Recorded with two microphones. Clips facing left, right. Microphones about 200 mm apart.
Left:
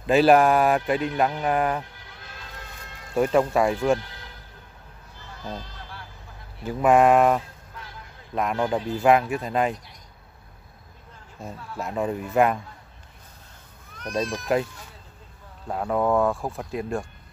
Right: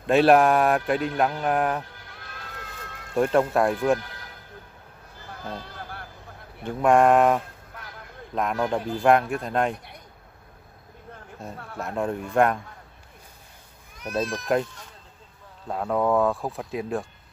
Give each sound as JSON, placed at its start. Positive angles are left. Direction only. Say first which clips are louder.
{"t": 0.0, "sound": "speech", "louder": "even", "side_deg": 0}
{"t": 3.2, "sound": "speech", "louder": "even", "side_deg": 0}
{"t": 5.3, "sound": "a sound", "louder": "even", "side_deg": -55}
{"t": 6.6, "sound": "speech", "louder": "left 1 dB", "side_deg": 5}
{"t": 11.5, "sound": "speech", "louder": "left 1 dB", "side_deg": -55}
{"t": 11.8, "sound": "speech", "louder": "left 1 dB", "side_deg": 0}
{"t": 13.9, "sound": "speech", "louder": "even", "side_deg": -5}